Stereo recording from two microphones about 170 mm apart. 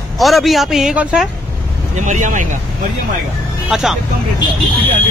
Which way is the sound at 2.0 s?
45° right (ahead or behind).